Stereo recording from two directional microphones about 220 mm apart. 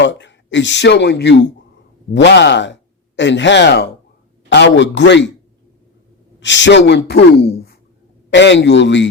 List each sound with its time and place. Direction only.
0.0 s speech: 55° left (ahead or behind)
6.4 s speech: 55° left (ahead or behind)